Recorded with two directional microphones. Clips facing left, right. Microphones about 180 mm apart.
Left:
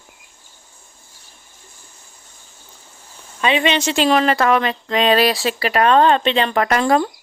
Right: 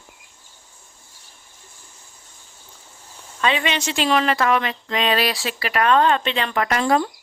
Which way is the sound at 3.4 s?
20° left (ahead or behind).